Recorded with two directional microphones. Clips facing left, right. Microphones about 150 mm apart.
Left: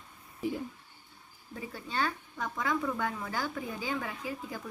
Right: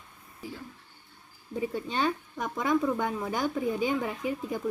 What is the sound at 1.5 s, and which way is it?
Speech, 20° right (ahead or behind).